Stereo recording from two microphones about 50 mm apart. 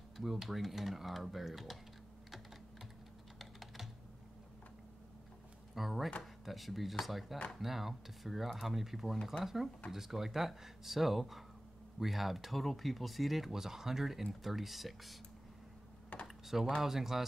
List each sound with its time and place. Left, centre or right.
0.2 s speech: centre
3.3 s typing: centre
5.8 s speech: centre
16.1 s computer keyboard: left
16.4 s speech: centre